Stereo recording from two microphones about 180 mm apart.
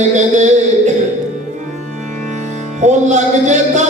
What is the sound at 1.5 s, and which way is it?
Music, 40° right (ahead or behind).